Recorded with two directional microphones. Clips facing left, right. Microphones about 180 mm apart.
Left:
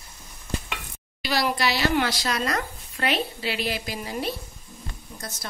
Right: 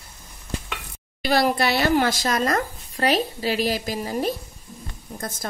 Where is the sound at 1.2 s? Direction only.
50° right (ahead or behind).